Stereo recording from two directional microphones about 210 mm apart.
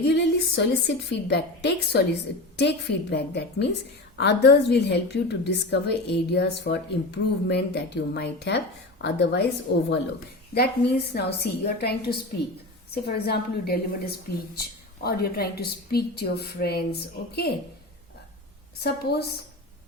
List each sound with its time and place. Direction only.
0.1 s a woman's voice: 55° left (ahead or behind)
18.8 s a woman's voice: 50° left (ahead or behind)